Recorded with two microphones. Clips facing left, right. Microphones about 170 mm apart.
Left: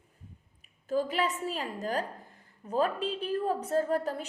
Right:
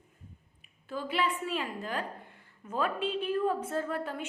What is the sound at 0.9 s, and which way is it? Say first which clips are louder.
A woman's voice: left 3 dB; 40° left (ahead or behind).